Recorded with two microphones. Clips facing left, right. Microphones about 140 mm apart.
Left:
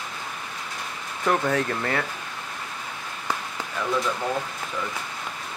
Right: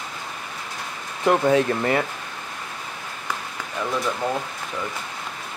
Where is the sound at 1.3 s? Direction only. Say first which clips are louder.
Right 5 dB; 20° right (ahead or behind).